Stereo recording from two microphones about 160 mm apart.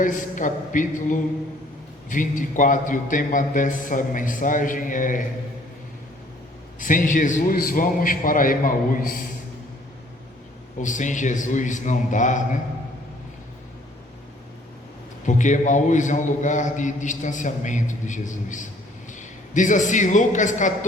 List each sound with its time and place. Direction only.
0.0 s a man's voice: 55° left (ahead or behind)
6.7 s a man's voice: 55° left (ahead or behind)
10.8 s a man's voice: 50° left (ahead or behind)
15.3 s a man's voice: 50° left (ahead or behind)